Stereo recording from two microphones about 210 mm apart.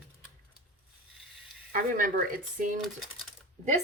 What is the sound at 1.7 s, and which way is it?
A woman's voice, 40° right (ahead or behind).